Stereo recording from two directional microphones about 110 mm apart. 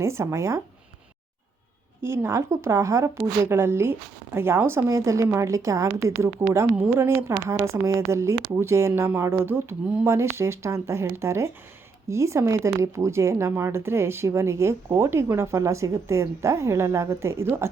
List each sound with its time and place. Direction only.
0.0 s speech: 25° right (ahead or behind)
2.0 s speech: 20° right (ahead or behind)